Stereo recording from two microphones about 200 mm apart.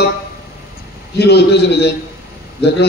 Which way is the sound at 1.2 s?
55° left (ahead or behind).